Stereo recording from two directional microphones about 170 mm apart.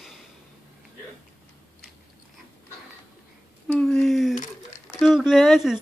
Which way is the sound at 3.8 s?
Centre (ahead or behind).